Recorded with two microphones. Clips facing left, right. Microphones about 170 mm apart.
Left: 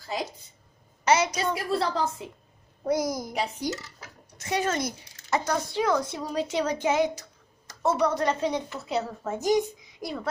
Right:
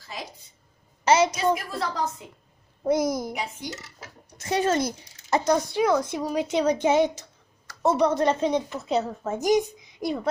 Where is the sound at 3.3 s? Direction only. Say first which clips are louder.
Left 3 dB; 35° left (ahead or behind).